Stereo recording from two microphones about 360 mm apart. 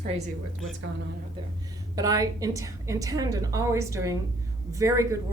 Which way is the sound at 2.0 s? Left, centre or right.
Centre.